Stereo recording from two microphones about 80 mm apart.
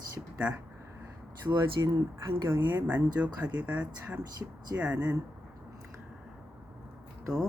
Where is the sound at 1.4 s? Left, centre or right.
Right.